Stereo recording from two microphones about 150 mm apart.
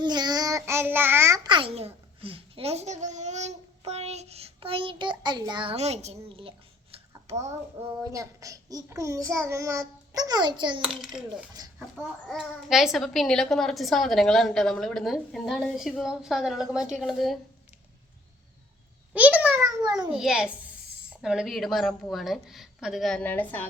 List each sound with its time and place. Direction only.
0.0 s child singing: 30° right (ahead or behind)
1.5 s a child's voice: 35° right (ahead or behind)
5.7 s a child's voice: 45° right (ahead or behind)
7.3 s a child's voice: 50° right (ahead or behind)
7.8 s a child's voice: 20° right (ahead or behind)
10.8 s a woman's voice: 5° right (ahead or behind)
11.6 s speech: 25° right (ahead or behind)
12.3 s a woman's voice: centre (ahead or behind)
19.1 s a child's voice: 10° right (ahead or behind)
19.6 s a child's voice: 25° right (ahead or behind)
20.1 s a woman's voice: 5° right (ahead or behind); by 23.6 s 10° left (ahead or behind)